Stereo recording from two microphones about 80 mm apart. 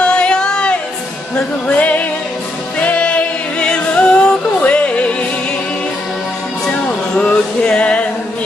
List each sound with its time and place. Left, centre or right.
0.0 s music: centre
6.7 s music: centre